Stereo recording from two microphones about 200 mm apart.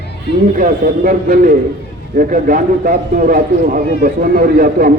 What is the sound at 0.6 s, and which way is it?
A man's voice, 45° right (ahead or behind).